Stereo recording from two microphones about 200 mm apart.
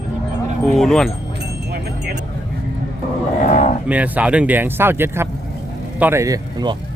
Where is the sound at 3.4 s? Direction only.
35° left (ahead or behind).